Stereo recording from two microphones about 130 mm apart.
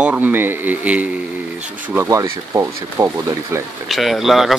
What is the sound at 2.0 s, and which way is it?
Speech, 25° right (ahead or behind).